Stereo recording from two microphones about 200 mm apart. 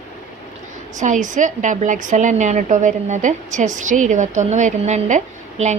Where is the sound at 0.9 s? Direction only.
40° right (ahead or behind).